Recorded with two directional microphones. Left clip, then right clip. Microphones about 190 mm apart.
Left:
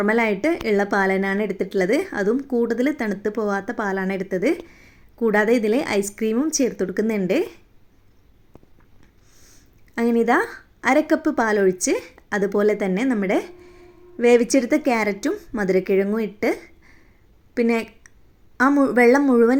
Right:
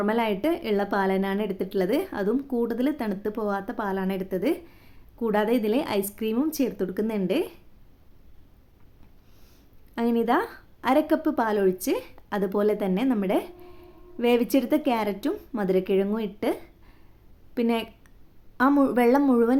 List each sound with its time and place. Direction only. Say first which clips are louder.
0.0 s a woman's voice: left 5 dB; 15° left (ahead or behind)
9.4 s a woman's voice: left 7 dB; 15° left (ahead or behind)